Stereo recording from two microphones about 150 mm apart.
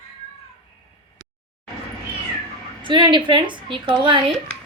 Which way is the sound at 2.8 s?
30° right (ahead or behind).